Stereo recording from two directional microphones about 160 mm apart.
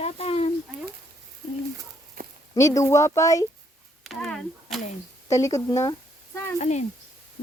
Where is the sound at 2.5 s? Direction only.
20° left (ahead or behind).